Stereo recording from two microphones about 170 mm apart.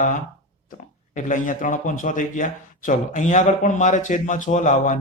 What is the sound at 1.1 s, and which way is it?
Speech, 50° left (ahead or behind).